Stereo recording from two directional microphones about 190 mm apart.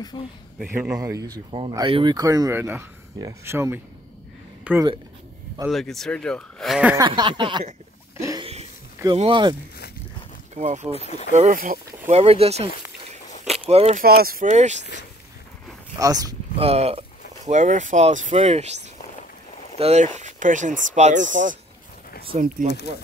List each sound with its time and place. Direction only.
0.1 s speech: 25° left (ahead or behind)
0.9 s speech: 15° right (ahead or behind)
7.0 s speech: 25° right (ahead or behind)
8.2 s a sound: 20° right (ahead or behind)
9.0 s speech: 25° right (ahead or behind)
10.5 s speech: 35° right (ahead or behind)
11.0 s speech: 35° left (ahead or behind)
11.3 s speech: 45° right (ahead or behind)
12.1 s speech: 30° right (ahead or behind)
14.0 s speech: 50° right (ahead or behind)
16.0 s speech: 20° right (ahead or behind)
16.6 s speech: 30° right (ahead or behind)
19.8 s speech: 35° right (ahead or behind)